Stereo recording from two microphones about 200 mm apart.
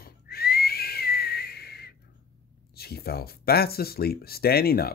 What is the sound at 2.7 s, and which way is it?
Speech, 50° left (ahead or behind).